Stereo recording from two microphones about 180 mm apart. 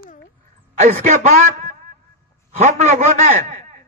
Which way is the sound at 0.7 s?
40° right (ahead or behind).